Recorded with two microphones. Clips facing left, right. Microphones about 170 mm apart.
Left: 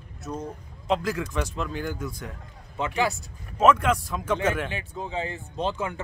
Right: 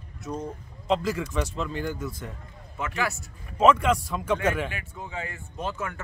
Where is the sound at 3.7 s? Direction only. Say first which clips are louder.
Even; centre (ahead or behind).